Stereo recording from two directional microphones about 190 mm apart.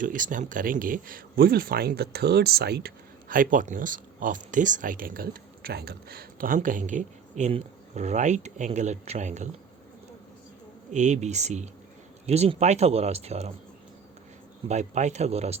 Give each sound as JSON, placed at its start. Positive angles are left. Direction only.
{"t": 0.0, "sound": "speech", "side_deg": -45}
{"t": 10.9, "sound": "speech", "side_deg": -40}
{"t": 14.7, "sound": "speech", "side_deg": -40}